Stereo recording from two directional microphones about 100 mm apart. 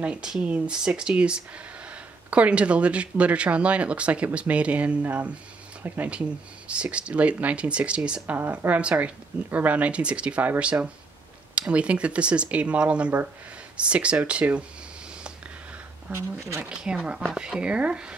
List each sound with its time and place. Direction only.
0.0 s speech: 10° right (ahead or behind)
16.1 s speech: 25° right (ahead or behind)
16.6 s speech: 10° right (ahead or behind)